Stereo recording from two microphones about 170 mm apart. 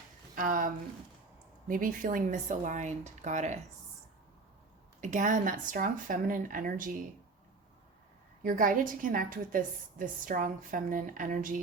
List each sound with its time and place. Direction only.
0.3 s a woman's voice: 55° right (ahead or behind)
4.9 s a woman's voice: 45° right (ahead or behind)
8.4 s a woman's voice: 50° right (ahead or behind)